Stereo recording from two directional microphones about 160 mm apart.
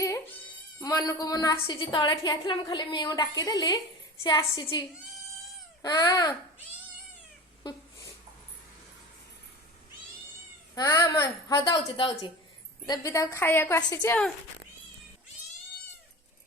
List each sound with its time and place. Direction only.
0.8 s a woman's voice: 25° left (ahead or behind)
5.8 s a woman's voice: 25° left (ahead or behind)
10.8 s a woman's voice: 20° left (ahead or behind)
12.8 s a woman's voice: 25° left (ahead or behind)